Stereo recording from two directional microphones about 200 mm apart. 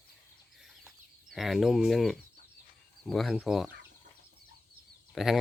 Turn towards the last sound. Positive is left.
turn(degrees=0)  # may be behind; listen again after turning